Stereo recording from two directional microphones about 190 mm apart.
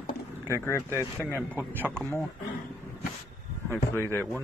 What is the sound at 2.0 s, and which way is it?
Speech, centre (ahead or behind).